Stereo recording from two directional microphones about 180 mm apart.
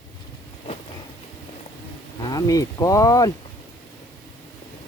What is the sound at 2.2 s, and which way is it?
Speech, 20° left (ahead or behind).